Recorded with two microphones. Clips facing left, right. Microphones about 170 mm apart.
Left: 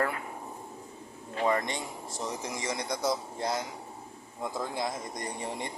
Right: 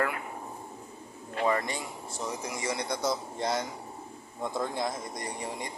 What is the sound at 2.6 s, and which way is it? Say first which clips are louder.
Speech: right 2 dB; 20° left (ahead or behind).